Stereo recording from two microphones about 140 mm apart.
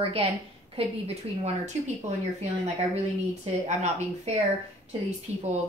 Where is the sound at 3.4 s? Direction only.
55° right (ahead or behind).